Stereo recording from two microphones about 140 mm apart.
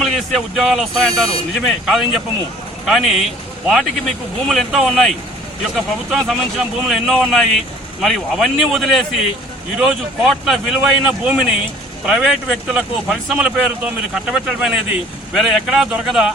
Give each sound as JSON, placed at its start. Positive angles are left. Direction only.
{"t": 0.0, "sound": "speech", "side_deg": 0}